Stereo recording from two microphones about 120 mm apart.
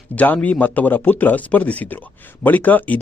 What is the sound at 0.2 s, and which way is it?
Speech, 15° left (ahead or behind).